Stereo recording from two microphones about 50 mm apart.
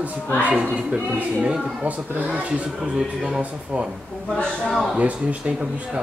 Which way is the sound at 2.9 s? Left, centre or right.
Centre.